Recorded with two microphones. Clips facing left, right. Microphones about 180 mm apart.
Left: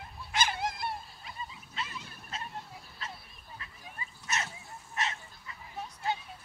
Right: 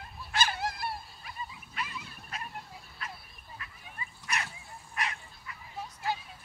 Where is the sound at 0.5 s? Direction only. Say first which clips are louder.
Even; 20° left (ahead or behind).